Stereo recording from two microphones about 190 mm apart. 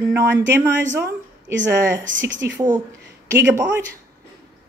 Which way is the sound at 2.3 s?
75° right (ahead or behind).